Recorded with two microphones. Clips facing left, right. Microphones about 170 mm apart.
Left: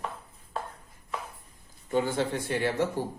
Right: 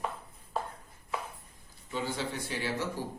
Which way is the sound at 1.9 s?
50° left (ahead or behind).